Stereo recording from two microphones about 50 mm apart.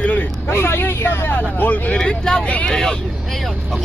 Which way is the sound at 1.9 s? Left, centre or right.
Centre.